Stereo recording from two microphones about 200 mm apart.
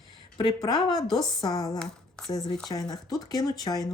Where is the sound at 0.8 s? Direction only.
Centre (ahead or behind).